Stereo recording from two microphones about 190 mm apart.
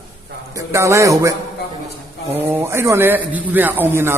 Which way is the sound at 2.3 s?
10° right (ahead or behind).